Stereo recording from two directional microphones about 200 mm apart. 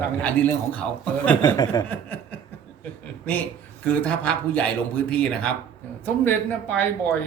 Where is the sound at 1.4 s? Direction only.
20° left (ahead or behind).